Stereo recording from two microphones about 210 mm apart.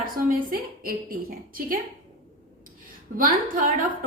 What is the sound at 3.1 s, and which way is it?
Speech, 40° right (ahead or behind).